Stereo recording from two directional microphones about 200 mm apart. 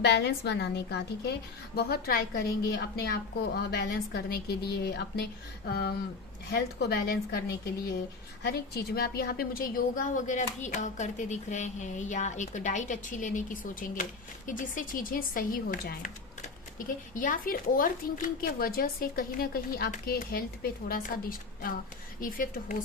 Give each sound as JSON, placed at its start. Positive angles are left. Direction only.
{"t": 0.0, "sound": "a woman's voice", "side_deg": 55}